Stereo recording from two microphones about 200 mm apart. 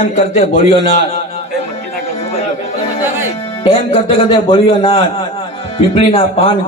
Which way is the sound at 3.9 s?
25° left (ahead or behind).